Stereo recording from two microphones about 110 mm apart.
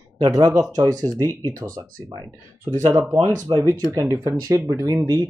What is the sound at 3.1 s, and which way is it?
Speech, 30° right (ahead or behind).